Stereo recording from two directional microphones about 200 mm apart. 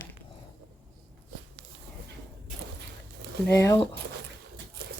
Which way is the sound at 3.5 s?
15° left (ahead or behind).